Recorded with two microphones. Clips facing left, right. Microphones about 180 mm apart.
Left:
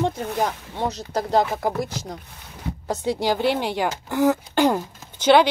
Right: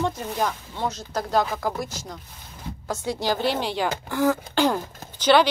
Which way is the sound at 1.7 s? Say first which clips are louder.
Left 4 dB; 60° left (ahead or behind).